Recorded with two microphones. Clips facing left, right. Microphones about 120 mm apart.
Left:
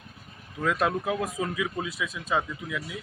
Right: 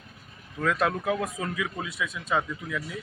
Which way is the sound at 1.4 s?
20° left (ahead or behind).